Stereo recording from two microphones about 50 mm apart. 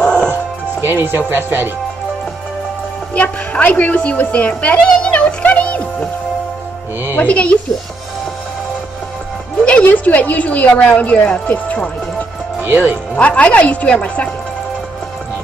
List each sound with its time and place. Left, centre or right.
0.0 s music: left
0.3 s music: right
3.2 s a woman's voice: left
5.4 s music: left
7.2 s a woman's voice: left
9.8 s a woman's voice: left
12.6 s speech: right
13.2 s a woman's voice: left